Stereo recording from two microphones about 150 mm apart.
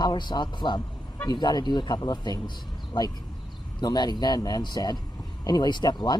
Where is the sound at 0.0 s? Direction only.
30° left (ahead or behind).